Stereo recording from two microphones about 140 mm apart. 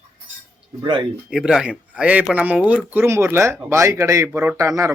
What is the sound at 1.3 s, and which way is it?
Speech, centre (ahead or behind).